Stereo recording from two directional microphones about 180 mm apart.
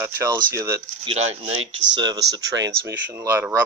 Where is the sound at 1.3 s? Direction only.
35° right (ahead or behind).